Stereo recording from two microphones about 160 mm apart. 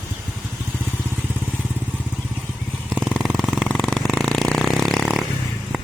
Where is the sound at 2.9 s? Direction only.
Centre (ahead or behind).